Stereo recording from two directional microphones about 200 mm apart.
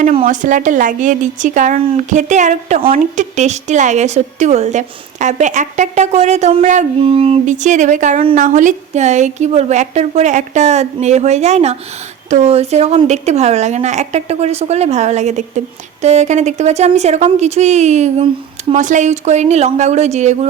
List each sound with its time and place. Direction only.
0.0 s a woman's voice: 35° right (ahead or behind)